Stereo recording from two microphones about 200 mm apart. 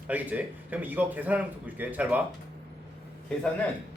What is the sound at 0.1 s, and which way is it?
Speech, 10° right (ahead or behind).